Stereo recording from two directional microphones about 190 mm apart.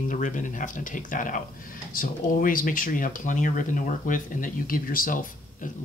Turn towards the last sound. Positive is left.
turn(degrees=45)  # may be behind; listen again after turning